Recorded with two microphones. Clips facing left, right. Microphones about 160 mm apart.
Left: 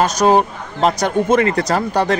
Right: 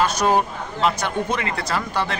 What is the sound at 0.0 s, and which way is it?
Speech, 40° left (ahead or behind).